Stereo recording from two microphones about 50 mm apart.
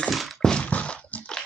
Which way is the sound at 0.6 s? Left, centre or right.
Left.